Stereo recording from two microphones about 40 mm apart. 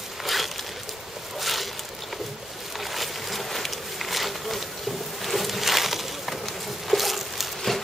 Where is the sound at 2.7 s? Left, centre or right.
Centre.